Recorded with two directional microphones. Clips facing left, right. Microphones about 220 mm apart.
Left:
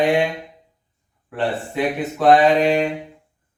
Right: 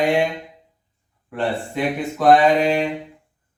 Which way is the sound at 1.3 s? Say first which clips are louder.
Even; centre (ahead or behind).